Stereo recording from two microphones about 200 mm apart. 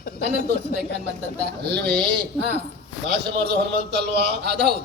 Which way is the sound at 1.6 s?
55° right (ahead or behind).